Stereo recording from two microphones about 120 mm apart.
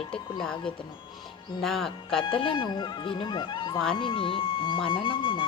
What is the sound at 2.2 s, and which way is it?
Speech, 45° left (ahead or behind).